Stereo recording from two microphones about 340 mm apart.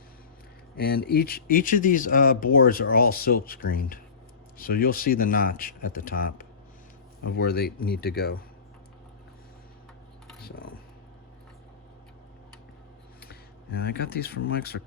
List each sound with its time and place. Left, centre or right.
0.8 s speech: left
10.4 s speech: left
13.2 s speech: left